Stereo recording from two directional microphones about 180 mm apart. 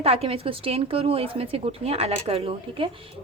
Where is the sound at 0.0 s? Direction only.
35° right (ahead or behind).